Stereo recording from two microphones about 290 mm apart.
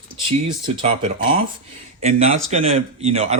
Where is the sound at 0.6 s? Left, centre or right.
Right.